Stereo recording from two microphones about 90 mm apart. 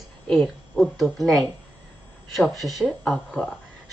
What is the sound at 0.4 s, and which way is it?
Speech, centre (ahead or behind).